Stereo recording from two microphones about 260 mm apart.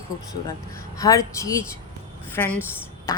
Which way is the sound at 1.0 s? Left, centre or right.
Centre.